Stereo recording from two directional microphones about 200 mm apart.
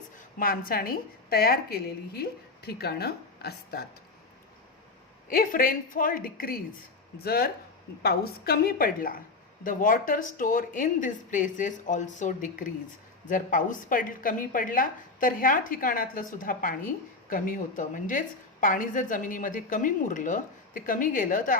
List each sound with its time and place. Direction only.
0.3 s a woman's voice: 45° left (ahead or behind)
5.3 s a woman's voice: 45° left (ahead or behind)